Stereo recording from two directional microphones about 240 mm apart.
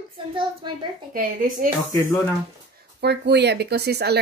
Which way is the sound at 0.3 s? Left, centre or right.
Centre.